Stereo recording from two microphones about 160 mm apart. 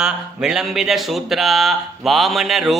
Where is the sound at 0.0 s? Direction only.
5° right (ahead or behind).